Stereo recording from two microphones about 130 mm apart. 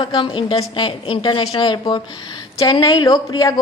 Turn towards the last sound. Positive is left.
turn(degrees=30)  # may be behind; listen again after turning